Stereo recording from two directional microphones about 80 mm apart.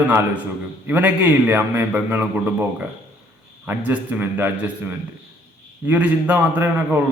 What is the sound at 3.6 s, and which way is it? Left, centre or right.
A man's voice, right.